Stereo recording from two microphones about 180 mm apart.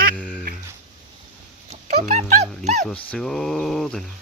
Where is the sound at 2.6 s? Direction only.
40° right (ahead or behind).